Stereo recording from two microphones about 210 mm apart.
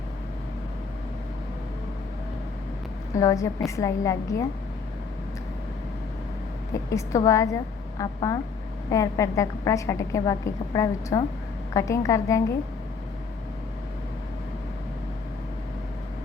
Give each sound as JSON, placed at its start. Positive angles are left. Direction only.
{"t": 3.2, "sound": "a woman's voice", "side_deg": 15}
{"t": 6.9, "sound": "a woman's voice", "side_deg": 15}